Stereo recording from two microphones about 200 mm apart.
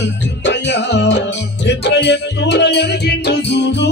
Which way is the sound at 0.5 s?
60° left (ahead or behind).